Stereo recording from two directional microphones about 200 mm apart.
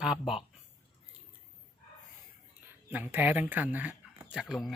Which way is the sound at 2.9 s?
10° right (ahead or behind).